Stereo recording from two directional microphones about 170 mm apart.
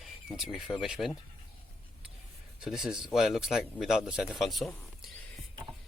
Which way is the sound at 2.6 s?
5° right (ahead or behind).